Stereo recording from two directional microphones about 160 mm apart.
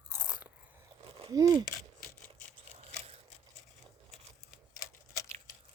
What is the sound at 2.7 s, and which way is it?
Scissors, 40° right (ahead or behind).